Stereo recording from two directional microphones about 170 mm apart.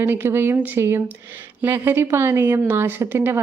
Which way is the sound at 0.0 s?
15° right (ahead or behind).